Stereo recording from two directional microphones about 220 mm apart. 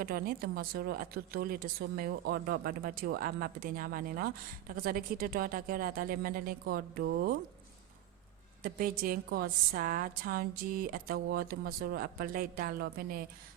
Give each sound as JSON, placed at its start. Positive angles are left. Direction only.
{"t": 0.0, "sound": "a woman's voice", "side_deg": -40}
{"t": 8.6, "sound": "a woman's voice", "side_deg": -40}